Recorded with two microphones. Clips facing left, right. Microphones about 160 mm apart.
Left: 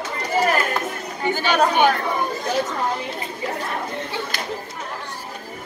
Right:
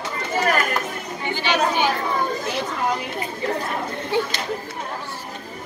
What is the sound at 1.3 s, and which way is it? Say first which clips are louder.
Speech: left 2 dB; 50° left (ahead or behind).